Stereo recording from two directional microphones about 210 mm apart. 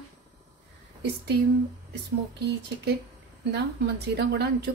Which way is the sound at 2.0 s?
50° right (ahead or behind).